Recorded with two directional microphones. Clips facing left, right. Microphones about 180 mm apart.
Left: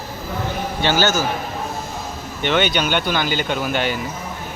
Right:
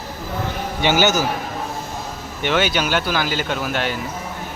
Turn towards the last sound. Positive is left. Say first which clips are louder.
# left 2 dB
turn(degrees=0)  # may be behind; listen again after turning